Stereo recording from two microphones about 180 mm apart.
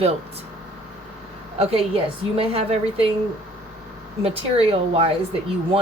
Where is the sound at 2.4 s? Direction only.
30° right (ahead or behind).